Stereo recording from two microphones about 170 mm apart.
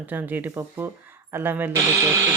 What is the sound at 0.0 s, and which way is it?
Speech, 10° right (ahead or behind).